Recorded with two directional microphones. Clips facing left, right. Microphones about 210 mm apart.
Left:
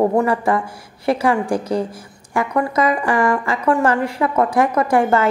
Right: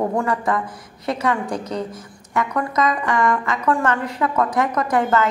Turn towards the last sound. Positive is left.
turn(degrees=30)  # may be behind; listen again after turning